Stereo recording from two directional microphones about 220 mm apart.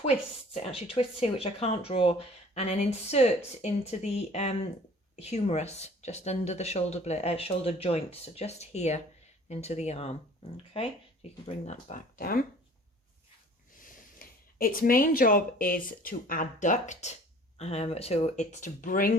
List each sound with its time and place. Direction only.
0.0 s speech: 30° left (ahead or behind)
11.4 s speech: 30° left (ahead or behind)
13.7 s speech: 40° left (ahead or behind)